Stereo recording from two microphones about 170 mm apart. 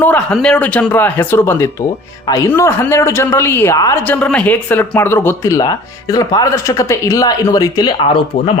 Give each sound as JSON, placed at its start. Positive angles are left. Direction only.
{"t": 0.0, "sound": "speech", "side_deg": 10}